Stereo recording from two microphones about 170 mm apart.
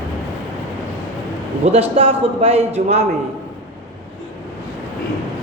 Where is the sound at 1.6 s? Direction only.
35° right (ahead or behind).